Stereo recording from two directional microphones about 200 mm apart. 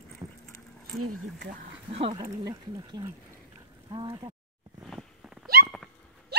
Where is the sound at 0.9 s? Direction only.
90° right.